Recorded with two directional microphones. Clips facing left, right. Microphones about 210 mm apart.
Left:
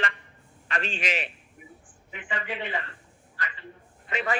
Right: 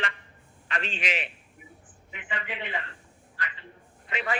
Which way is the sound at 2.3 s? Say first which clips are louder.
Left 3 dB; 40° left (ahead or behind).